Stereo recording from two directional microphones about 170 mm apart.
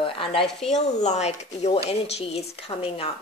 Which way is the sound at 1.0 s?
40° left (ahead or behind).